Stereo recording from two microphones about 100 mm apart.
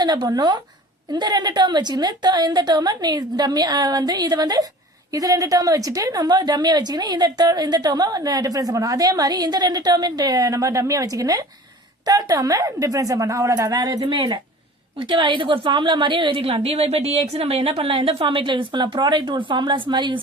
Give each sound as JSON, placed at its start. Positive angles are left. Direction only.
{"t": 0.0, "sound": "a woman's voice", "side_deg": -45}
{"t": 14.0, "sound": "a woman's voice", "side_deg": -55}